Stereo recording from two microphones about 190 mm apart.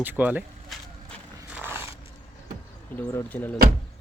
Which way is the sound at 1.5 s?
10° right (ahead or behind).